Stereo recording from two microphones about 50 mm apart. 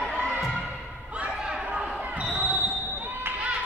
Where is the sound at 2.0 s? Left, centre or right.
Right.